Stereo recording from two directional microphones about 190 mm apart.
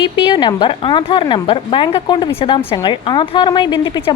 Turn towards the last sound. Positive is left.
turn(degrees=20)  # may be behind; listen again after turning